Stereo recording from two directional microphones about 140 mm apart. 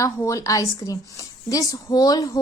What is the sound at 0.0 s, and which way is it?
A woman's voice, 25° left (ahead or behind).